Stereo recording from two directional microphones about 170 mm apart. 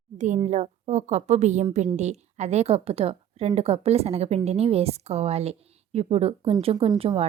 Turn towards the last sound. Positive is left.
turn(degrees=-35)  # may be behind; listen again after turning